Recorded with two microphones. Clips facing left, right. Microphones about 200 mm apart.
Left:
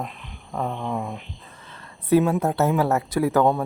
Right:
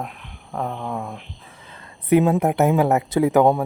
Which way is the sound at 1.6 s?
20° right (ahead or behind).